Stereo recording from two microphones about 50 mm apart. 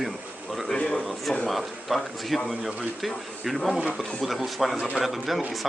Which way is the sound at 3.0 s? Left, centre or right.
Centre.